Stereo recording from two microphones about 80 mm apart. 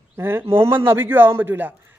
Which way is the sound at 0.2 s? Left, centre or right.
Right.